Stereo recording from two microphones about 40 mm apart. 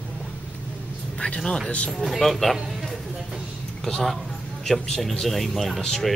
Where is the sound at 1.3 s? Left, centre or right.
Centre.